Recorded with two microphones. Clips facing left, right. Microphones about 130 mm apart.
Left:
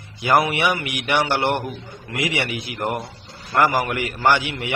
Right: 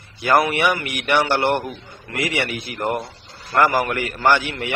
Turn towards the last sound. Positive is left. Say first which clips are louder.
# right 1 dB
turn(degrees=15)  # may be behind; listen again after turning